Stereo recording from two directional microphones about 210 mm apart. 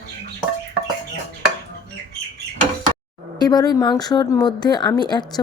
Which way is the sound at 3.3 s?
20° left (ahead or behind).